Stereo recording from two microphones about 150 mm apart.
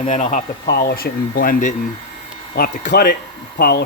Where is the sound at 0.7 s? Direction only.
85° left; by 1.7 s 70° left (ahead or behind).